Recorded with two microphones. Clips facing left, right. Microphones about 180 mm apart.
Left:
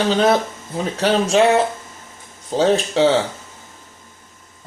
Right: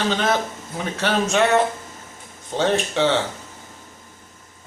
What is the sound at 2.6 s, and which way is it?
Speech, 35° left (ahead or behind).